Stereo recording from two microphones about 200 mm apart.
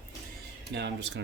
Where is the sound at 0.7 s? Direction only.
60° right (ahead or behind).